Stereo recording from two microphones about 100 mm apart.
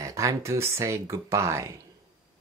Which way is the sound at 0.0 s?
30° right (ahead or behind).